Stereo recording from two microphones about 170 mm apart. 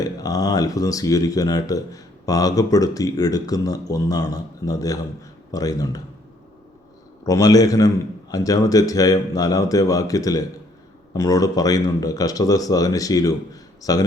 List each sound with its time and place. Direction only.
0.0 s speech: 20° left (ahead or behind)
7.3 s speech: 20° left (ahead or behind)